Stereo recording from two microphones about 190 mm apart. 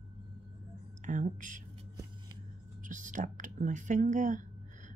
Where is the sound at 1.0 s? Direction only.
40° right (ahead or behind).